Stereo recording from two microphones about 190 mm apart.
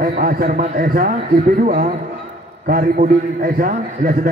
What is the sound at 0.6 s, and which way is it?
Speech, 45° right (ahead or behind).